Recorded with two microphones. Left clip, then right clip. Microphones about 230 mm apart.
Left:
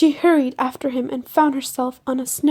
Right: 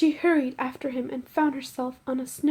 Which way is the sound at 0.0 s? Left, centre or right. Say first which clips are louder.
Left 7 dB; left.